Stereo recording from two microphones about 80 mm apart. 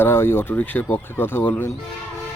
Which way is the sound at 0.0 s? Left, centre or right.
Left.